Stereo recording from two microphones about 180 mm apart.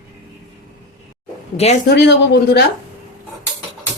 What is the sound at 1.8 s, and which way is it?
Speech, 70° left (ahead or behind).